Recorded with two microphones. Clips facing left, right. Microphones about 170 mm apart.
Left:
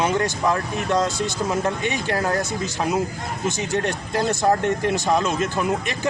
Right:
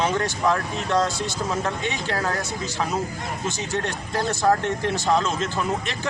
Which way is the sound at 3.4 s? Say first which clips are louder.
Left 5 dB; 15° left (ahead or behind).